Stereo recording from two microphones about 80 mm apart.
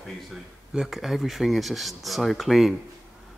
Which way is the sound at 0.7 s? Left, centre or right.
Centre.